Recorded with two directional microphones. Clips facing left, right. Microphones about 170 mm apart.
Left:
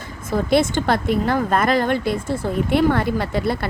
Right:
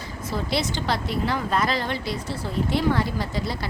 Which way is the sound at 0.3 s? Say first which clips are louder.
Left 9 dB; 50° left (ahead or behind).